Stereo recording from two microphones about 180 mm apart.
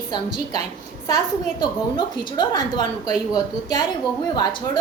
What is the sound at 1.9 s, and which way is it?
A woman's voice, 25° left (ahead or behind).